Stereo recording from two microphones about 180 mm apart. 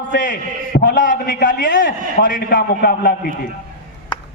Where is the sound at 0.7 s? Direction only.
70° left (ahead or behind).